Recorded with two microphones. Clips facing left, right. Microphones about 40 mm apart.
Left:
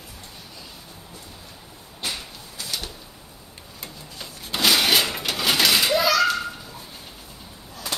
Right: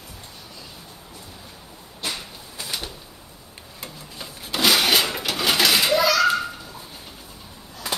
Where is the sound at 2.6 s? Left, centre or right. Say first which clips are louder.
Right 1 dB; centre.